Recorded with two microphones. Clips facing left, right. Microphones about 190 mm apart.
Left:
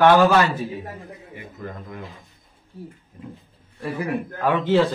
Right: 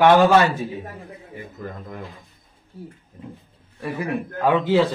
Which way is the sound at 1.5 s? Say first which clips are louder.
Even; 35° right (ahead or behind).